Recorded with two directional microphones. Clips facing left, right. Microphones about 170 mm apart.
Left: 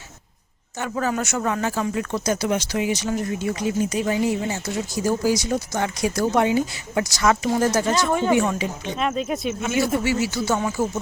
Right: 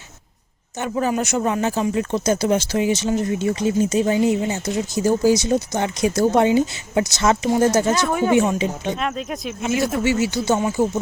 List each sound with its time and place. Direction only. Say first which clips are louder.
0.8 s speech: right 3 dB; 20° right (ahead or behind)
7.9 s speech: right 1 dB; 5° right (ahead or behind)
8.3 s speech: right 5 dB; 20° right (ahead or behind)
9.0 s speech: left 2 dB; centre (ahead or behind)
10.0 s speech: right 3 dB; 20° right (ahead or behind)